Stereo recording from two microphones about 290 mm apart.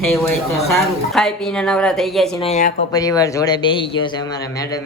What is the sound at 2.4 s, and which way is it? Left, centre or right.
Speech, left.